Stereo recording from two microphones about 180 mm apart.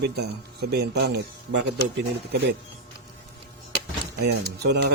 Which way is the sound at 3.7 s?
65° right (ahead or behind).